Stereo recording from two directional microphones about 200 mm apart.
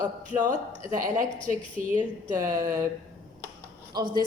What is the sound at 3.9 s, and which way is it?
Speech, 20° right (ahead or behind).